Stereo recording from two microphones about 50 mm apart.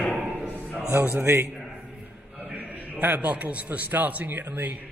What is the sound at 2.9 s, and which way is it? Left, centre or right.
A man's voice, right.